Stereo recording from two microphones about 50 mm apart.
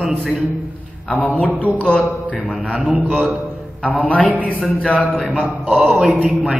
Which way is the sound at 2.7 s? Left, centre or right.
Right.